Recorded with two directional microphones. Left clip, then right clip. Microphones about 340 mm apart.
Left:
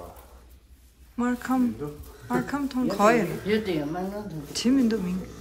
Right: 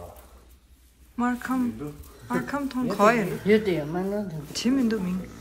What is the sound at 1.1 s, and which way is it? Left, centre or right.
Speech, centre.